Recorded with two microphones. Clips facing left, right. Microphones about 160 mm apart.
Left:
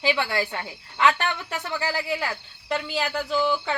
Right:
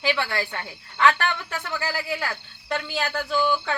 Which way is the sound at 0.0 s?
15° left (ahead or behind).